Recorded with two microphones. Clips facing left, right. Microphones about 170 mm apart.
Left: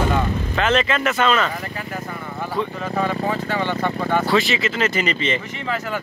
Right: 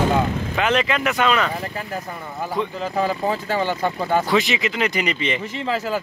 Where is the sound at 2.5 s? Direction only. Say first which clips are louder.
Even; 25° right (ahead or behind).